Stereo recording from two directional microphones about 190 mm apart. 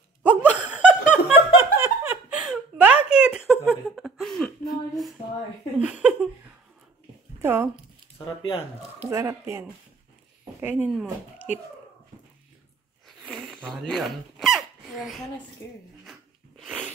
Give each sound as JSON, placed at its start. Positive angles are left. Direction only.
{"t": 0.2, "sound": "a sound", "side_deg": -10}
{"t": 0.7, "sound": "laughter", "side_deg": -5}
{"t": 3.6, "sound": "a sound", "side_deg": -5}
{"t": 7.4, "sound": "speech", "side_deg": -10}
{"t": 8.4, "sound": "speech", "side_deg": 30}
{"t": 9.1, "sound": "speech", "side_deg": -15}
{"t": 13.0, "sound": "squeak", "side_deg": 0}
{"t": 15.6, "sound": "speech", "side_deg": 15}
{"t": 16.1, "sound": "a sound", "side_deg": -5}